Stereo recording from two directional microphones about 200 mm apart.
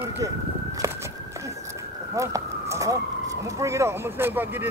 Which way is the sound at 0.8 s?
15° right (ahead or behind).